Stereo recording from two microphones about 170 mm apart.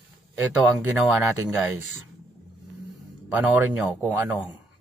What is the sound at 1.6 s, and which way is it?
Speech, 10° right (ahead or behind).